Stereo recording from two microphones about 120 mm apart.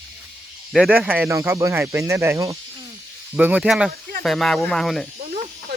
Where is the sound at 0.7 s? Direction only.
5° right (ahead or behind).